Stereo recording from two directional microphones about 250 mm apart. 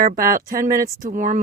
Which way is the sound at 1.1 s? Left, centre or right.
Right.